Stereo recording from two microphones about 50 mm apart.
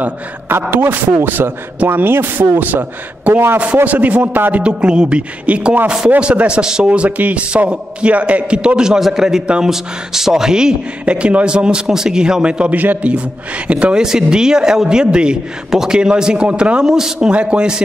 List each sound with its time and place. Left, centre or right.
0.5 s a man's voice: right
3.3 s a man's voice: right
4.6 s a man's voice: right
6.9 s a man's voice: right
12.7 s a man's voice: right
14.0 s speech: centre
16.8 s speech: centre
17.3 s a man's voice: right